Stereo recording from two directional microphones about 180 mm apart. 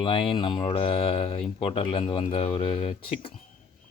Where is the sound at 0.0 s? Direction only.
30° left (ahead or behind).